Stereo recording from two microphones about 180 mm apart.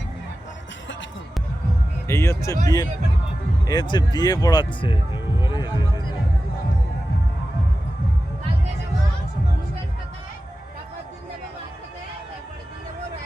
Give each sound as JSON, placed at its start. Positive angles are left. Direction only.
{"t": 2.0, "sound": "speech", "side_deg": 15}